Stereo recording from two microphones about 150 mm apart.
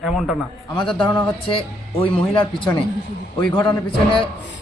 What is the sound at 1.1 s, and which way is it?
Speech, 35° left (ahead or behind).